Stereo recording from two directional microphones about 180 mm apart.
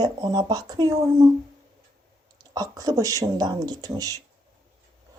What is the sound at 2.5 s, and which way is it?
Speech, 20° right (ahead or behind).